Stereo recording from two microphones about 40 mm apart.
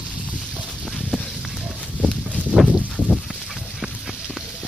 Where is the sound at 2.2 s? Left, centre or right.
Right.